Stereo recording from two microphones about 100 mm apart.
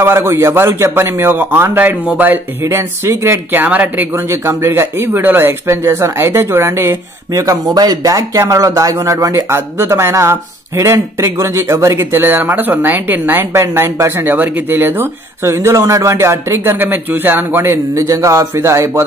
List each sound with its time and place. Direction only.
0.0 s a man's voice: 25° right (ahead or behind)